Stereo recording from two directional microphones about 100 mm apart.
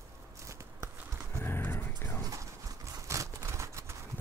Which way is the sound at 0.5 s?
25° right (ahead or behind).